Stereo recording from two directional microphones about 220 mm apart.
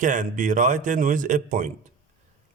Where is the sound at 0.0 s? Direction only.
35° right (ahead or behind).